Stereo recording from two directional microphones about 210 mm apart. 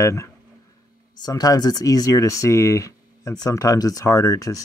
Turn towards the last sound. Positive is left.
turn(degrees=15)  # may be behind; listen again after turning